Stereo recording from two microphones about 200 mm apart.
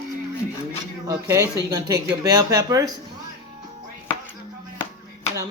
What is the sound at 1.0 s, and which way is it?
Speech, 15° right (ahead or behind).